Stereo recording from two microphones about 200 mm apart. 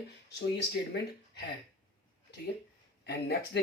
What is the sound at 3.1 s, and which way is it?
Speech, 55° left (ahead or behind).